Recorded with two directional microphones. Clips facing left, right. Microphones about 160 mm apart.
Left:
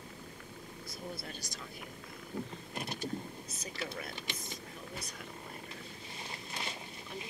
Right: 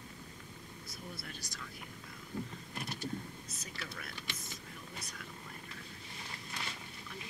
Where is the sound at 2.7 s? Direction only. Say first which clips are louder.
Left 3 dB; 25° left (ahead or behind).